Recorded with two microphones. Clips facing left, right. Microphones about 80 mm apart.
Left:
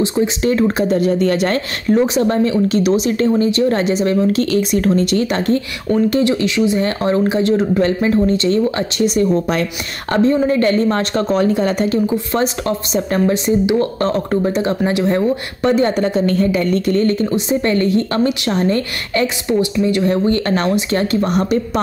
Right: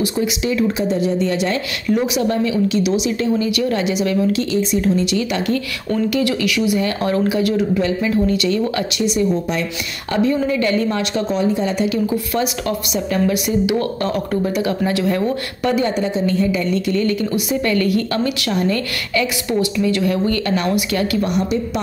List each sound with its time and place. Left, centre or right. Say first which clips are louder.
0.0 s speech: left 3 dB; left
0.4 s a woman's voice: left 4 dB; left
2.0 s a woman's voice: left 4 dB; left
4.4 s a woman's voice: left 3 dB; left
9.0 s a woman's voice: left 4 dB; left
10.1 s a woman's voice: left 4 dB; left
12.4 s a woman's voice: left 4 dB; left
16.0 s a woman's voice: left 3 dB; left